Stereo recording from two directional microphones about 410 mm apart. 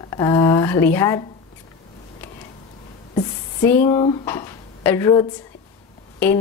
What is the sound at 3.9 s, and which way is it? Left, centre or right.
A woman's voice, centre.